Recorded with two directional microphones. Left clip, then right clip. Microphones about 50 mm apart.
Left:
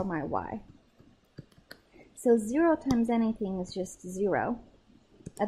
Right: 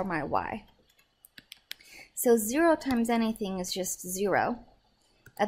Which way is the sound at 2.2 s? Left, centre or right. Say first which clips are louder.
Right 1 dB; centre.